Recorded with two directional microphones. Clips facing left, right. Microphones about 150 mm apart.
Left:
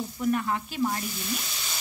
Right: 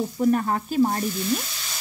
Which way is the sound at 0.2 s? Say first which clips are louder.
Right 5 dB; 40° right (ahead or behind).